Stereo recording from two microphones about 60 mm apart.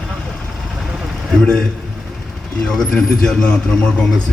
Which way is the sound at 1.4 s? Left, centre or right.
Centre.